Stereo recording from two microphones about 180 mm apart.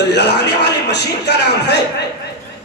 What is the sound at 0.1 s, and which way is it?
Speech, 70° left (ahead or behind).